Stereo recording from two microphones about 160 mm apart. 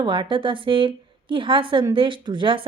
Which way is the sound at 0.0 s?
30° right (ahead or behind).